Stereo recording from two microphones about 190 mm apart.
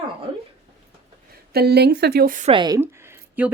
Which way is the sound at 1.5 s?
55° right (ahead or behind).